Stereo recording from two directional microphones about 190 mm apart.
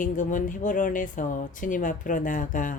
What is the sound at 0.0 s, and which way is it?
Speech, 45° left (ahead or behind).